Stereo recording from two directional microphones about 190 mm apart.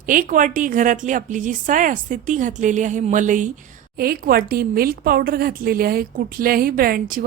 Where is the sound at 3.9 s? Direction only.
55° right (ahead or behind).